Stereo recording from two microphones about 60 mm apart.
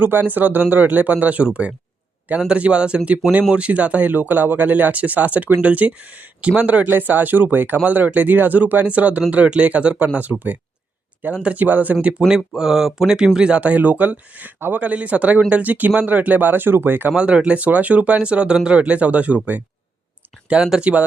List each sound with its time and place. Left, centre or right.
0.0 s speech: right
10.3 s speech: right
11.4 s speech: right
12.5 s speech: centre; by 17.2 s right
17.2 s speech: centre
20.5 s speech: centre